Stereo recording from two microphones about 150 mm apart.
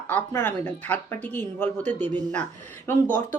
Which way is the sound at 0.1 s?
10° left (ahead or behind).